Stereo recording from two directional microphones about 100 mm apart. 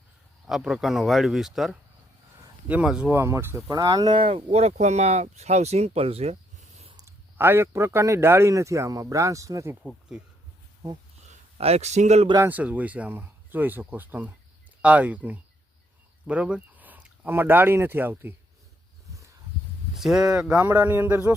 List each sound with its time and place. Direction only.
0.4 s speech: 5° right (ahead or behind)
3.1 s a man's voice: 25° right (ahead or behind)
3.7 s speech: 35° right (ahead or behind)
4.1 s speech: 70° right (ahead or behind); by 6.3 s 85° right
7.3 s a man's voice: 25° right (ahead or behind)
11.5 s speech: 90° right
12.5 s speech: 15° right (ahead or behind)
20.0 s speech: 5° right (ahead or behind)